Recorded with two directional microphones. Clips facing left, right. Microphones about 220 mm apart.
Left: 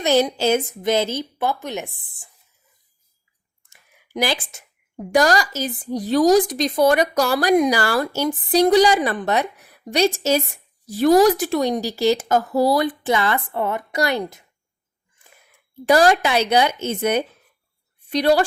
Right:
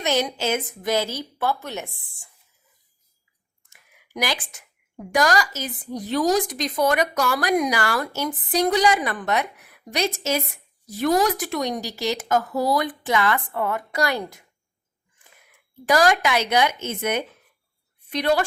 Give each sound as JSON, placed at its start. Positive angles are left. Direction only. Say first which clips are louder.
{"t": 0.0, "sound": "a woman's voice", "louder": "left 6 dB", "side_deg": 35}
{"t": 3.7, "sound": "a woman's voice", "louder": "left 5 dB", "side_deg": 30}
{"t": 15.9, "sound": "a woman's voice", "louder": "left 4 dB", "side_deg": 30}